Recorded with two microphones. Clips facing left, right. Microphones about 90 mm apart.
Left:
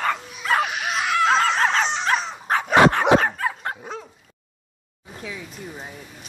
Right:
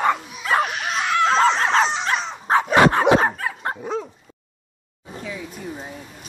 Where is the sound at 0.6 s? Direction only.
5° left (ahead or behind).